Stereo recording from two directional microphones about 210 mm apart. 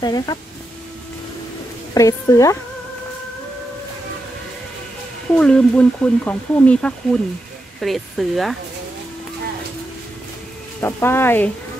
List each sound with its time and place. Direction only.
0.0 s speech: 20° left (ahead or behind)
2.0 s speech: 15° left (ahead or behind)
5.3 s speech: 5° left (ahead or behind)
10.8 s speech: 10° left (ahead or behind)